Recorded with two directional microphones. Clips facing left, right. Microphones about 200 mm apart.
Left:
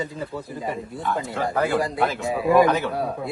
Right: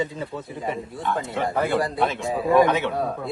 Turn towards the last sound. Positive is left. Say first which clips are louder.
# even
turn(degrees=0)  # may be behind; listen again after turning